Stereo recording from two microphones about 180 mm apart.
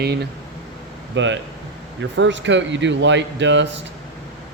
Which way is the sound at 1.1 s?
90° right.